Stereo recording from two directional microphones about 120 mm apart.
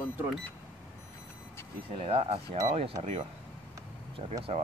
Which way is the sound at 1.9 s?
50° right (ahead or behind).